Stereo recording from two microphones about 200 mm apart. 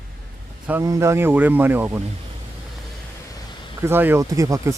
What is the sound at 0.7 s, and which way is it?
Speech, 15° right (ahead or behind).